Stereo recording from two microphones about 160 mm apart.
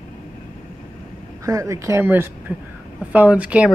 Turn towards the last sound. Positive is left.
turn(degrees=-10)  # may be behind; listen again after turning